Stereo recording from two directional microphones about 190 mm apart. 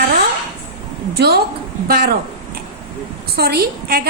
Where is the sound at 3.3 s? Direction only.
55° right (ahead or behind).